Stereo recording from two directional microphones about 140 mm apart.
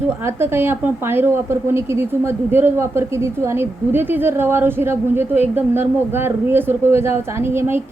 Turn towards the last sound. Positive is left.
turn(degrees=-15)  # may be behind; listen again after turning